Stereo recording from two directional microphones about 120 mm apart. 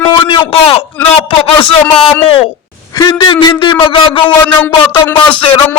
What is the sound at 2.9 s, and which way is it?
A man's voice, 35° left (ahead or behind).